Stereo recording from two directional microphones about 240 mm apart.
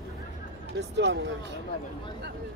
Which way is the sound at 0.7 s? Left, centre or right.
Right.